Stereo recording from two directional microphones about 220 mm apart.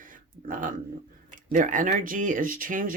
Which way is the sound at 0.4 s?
35° right (ahead or behind).